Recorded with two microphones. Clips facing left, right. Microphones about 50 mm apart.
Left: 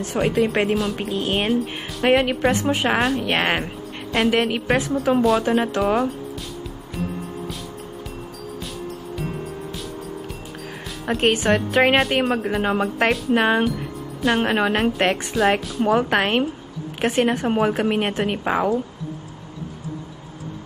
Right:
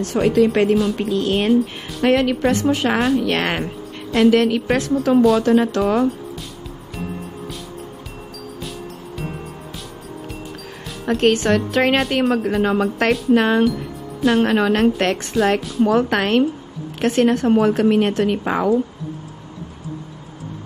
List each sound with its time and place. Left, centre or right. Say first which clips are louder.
0.0 s speech: right 4 dB; centre
1.5 s speech: right 5 dB; centre
2.0 s a woman's voice: right 1 dB; centre
5.9 s speech: right 3 dB; centre
9.2 s music: left 1 dB; centre
11.1 s speech: right 3 dB; centre
18.4 s speech: right 1 dB; centre